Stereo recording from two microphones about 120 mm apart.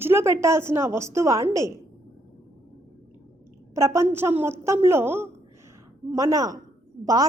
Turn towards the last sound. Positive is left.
turn(degrees=-30)  # may be behind; listen again after turning